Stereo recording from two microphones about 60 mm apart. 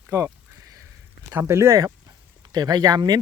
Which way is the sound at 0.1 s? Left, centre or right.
Right.